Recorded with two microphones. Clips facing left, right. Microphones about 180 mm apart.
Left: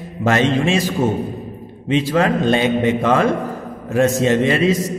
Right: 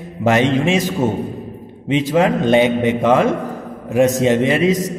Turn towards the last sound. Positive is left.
turn(degrees=-15)  # may be behind; listen again after turning